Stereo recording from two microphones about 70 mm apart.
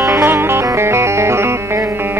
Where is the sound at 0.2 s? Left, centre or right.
Right.